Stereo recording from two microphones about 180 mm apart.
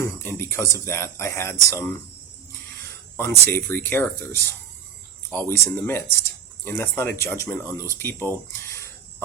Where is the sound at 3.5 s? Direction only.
10° left (ahead or behind).